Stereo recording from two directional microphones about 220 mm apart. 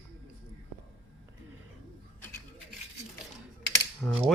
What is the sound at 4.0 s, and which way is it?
Mechanisms, centre (ahead or behind).